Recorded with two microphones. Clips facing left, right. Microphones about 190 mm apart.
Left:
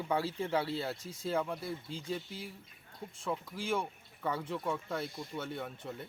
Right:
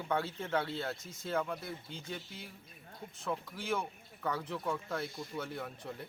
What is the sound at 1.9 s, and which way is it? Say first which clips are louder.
Speech: left 5 dB; 30° left (ahead or behind).